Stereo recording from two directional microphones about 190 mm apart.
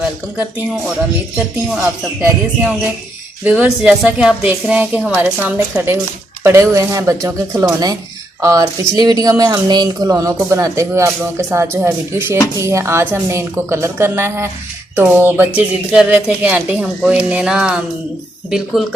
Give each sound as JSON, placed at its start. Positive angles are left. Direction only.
{"t": 3.4, "sound": "speech", "side_deg": -5}